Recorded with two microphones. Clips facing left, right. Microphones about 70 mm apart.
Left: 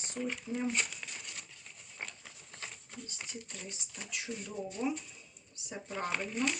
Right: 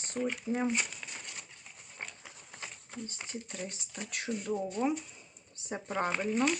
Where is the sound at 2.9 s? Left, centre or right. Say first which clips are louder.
Right 4 dB; right.